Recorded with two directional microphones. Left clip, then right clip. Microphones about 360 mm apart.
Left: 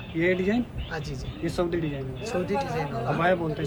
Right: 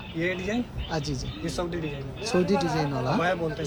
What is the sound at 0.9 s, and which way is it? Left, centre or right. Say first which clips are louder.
Speech: right 3 dB; centre.